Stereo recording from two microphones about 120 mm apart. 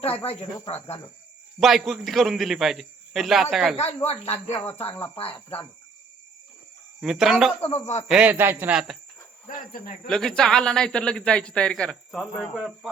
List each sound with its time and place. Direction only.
0.3 s speech: 55° left (ahead or behind)
1.5 s a man's voice: centre (ahead or behind)
4.0 s speech: 60° left (ahead or behind)
4.9 s speech: 15° left (ahead or behind)
7.0 s a man's voice: 5° right (ahead or behind)
7.6 s speech: 65° left (ahead or behind)
8.0 s speech: 10° right (ahead or behind)
10.1 s a man's voice: 5° left (ahead or behind)